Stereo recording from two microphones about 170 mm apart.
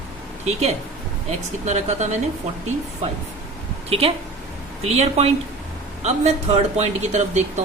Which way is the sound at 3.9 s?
35° right (ahead or behind).